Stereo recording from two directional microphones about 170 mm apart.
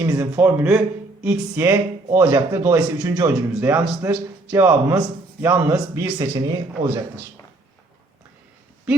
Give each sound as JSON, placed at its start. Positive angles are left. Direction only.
{"t": 0.0, "sound": "speech", "side_deg": -15}